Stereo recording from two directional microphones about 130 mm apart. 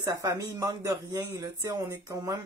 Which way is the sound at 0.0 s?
25° right (ahead or behind).